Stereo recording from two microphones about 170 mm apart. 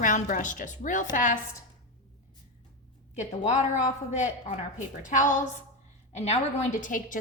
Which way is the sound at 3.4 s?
45° left (ahead or behind).